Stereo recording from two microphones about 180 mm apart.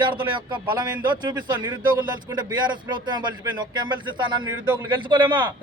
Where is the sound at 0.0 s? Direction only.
25° right (ahead or behind).